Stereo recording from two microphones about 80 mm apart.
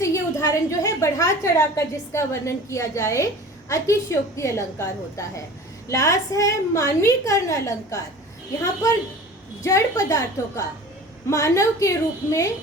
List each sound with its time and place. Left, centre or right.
0.0 s a woman's voice: left
9.6 s a woman's voice: left